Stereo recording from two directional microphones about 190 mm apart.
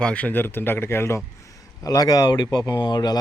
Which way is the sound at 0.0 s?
5° left (ahead or behind).